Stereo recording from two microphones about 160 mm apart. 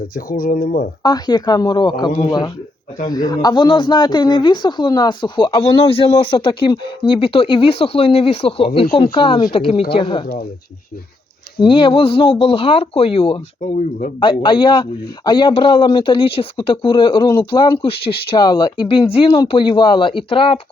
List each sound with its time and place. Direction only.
0.1 s speech: 60° left (ahead or behind)
1.0 s a man's voice: 25° left (ahead or behind)
11.6 s a man's voice: 30° left (ahead or behind)
13.6 s speech: 45° left (ahead or behind)
14.2 s a man's voice: 30° left (ahead or behind)